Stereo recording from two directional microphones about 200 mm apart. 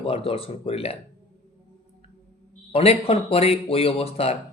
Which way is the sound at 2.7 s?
30° left (ahead or behind).